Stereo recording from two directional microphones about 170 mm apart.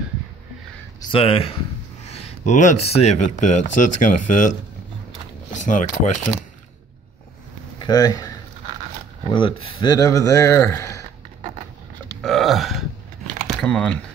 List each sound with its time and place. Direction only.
1.1 s speech: 35° left (ahead or behind)
7.8 s speech: 25° left (ahead or behind)
12.2 s burping: centre (ahead or behind)
13.5 s speech: 5° left (ahead or behind)